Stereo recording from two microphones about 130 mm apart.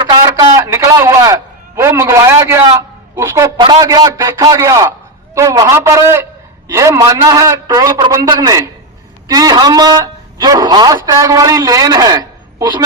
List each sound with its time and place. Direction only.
0.0 s telephone: 35° right (ahead or behind)
0.3 s a man's voice: 25° right (ahead or behind)
3.6 s a man's voice: 30° right (ahead or behind)